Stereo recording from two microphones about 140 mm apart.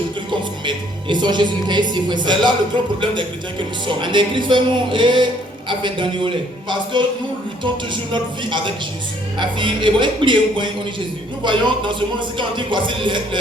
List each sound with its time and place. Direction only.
0.3 s speech: 35° right (ahead or behind)
8.1 s speech: 35° right (ahead or behind)